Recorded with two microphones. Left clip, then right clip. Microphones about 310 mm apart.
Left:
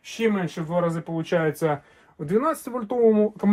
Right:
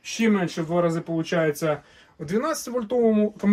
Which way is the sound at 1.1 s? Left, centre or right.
Centre.